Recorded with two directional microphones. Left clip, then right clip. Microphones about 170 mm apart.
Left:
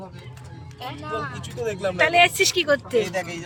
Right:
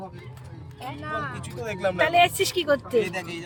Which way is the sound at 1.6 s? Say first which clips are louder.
Left 1 dB; 15° left (ahead or behind).